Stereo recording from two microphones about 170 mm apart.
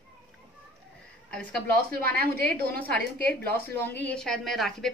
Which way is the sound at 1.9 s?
60° right (ahead or behind).